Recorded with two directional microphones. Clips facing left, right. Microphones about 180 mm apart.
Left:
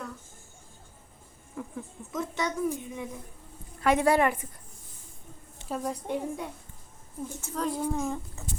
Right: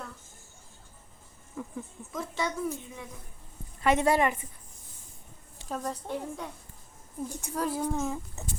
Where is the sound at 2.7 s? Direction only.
20° left (ahead or behind).